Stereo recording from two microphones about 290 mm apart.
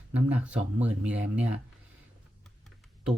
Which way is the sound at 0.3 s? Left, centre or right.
Centre.